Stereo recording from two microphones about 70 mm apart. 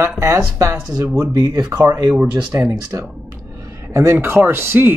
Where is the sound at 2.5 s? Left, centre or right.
Right.